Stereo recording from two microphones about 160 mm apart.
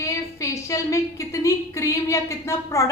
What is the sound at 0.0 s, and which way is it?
A woman's voice, 20° left (ahead or behind).